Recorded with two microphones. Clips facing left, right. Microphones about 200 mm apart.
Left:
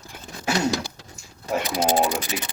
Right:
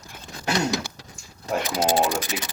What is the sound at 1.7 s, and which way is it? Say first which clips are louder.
Speech: even; 15° left (ahead or behind).